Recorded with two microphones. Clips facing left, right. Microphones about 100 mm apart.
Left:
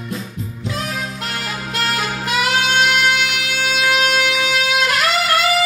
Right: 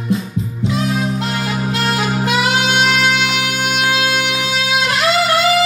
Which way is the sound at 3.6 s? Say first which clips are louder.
Left 1 dB; 45° right (ahead or behind).